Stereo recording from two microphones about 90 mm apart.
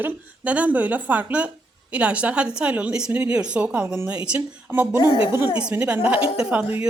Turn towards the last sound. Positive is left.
turn(degrees=-15)  # may be behind; listen again after turning